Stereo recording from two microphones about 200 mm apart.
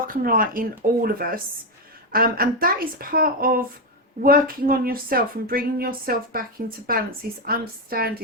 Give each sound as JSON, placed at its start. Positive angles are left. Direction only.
{"t": 0.1, "sound": "speech", "side_deg": -45}